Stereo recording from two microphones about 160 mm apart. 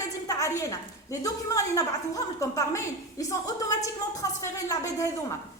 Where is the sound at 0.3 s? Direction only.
20° left (ahead or behind).